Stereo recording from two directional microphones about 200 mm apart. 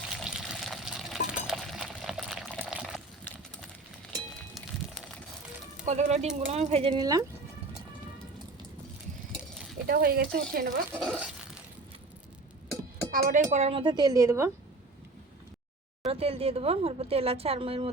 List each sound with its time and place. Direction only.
0.2 s water: centre (ahead or behind)
5.8 s speech: 35° right (ahead or behind); by 7.3 s 20° right (ahead or behind)
9.8 s speech: 50° right (ahead or behind)
10.9 s speech: 5° right (ahead or behind)
13.1 s speech: 45° right (ahead or behind); by 14.5 s 15° right (ahead or behind)
16.0 s speech: 30° right (ahead or behind)